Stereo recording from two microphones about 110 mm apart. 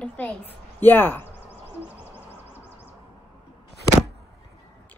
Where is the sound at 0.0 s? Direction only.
10° left (ahead or behind).